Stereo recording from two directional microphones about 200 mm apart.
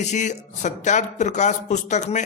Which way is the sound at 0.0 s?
35° left (ahead or behind).